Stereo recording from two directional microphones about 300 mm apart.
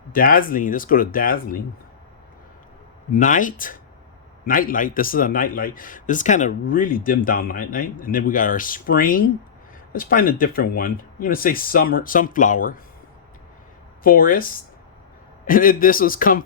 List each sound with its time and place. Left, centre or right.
0.1 s speech: left
3.1 s speech: left
14.0 s speech: left